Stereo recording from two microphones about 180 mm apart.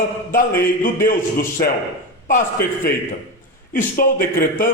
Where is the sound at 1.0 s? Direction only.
50° left (ahead or behind).